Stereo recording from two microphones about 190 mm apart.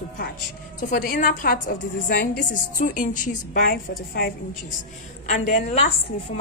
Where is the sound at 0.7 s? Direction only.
45° left (ahead or behind).